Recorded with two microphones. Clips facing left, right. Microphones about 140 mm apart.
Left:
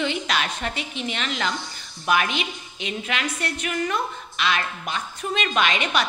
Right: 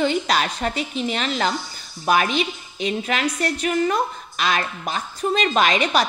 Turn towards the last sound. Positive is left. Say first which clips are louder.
# right 4 dB
turn(degrees=-35)  # may be behind; listen again after turning